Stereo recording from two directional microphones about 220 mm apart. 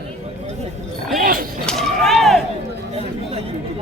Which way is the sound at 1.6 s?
Centre (ahead or behind).